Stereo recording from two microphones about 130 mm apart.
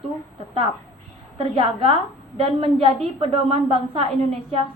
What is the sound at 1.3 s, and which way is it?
A woman's voice, 45° right (ahead or behind).